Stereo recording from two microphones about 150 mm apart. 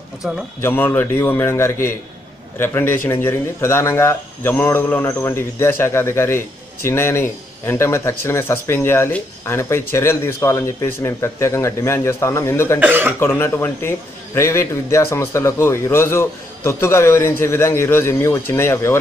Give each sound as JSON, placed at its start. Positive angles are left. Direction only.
{"t": 0.6, "sound": "speech", "side_deg": 15}
{"t": 12.8, "sound": "speech", "side_deg": -15}
{"t": 13.2, "sound": "speech", "side_deg": 15}